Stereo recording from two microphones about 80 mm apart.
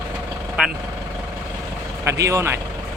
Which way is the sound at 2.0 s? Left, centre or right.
Right.